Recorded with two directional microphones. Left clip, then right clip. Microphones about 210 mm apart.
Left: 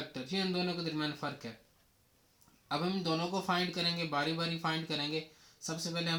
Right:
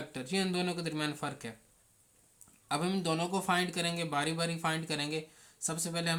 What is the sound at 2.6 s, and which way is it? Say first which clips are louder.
Speech: right 2 dB; 25° right (ahead or behind).